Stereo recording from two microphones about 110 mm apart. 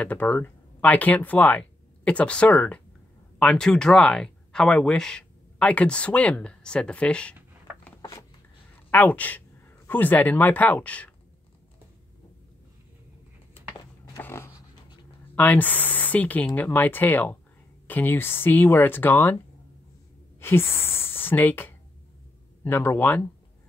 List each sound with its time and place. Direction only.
0.0 s speech: 15° left (ahead or behind)
8.9 s speech: 15° left (ahead or behind)
14.1 s dog: 25° left (ahead or behind)
15.3 s speech: 15° left (ahead or behind)